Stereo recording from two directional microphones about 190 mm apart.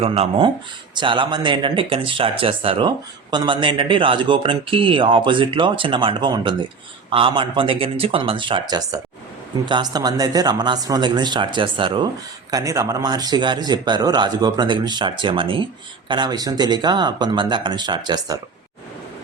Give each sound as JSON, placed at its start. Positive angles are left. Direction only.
{"t": 0.0, "sound": "speech", "side_deg": -30}